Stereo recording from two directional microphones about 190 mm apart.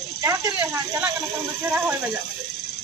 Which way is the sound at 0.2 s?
15° right (ahead or behind).